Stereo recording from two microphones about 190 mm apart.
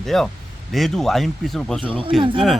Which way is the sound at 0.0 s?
Centre (ahead or behind).